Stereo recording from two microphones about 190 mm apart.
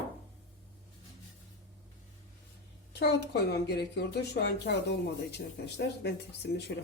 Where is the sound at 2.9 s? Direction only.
60° left (ahead or behind).